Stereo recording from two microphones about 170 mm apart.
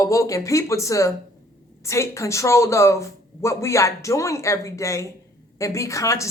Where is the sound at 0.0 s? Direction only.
20° left (ahead or behind).